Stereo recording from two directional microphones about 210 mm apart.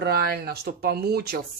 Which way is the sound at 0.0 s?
50° right (ahead or behind).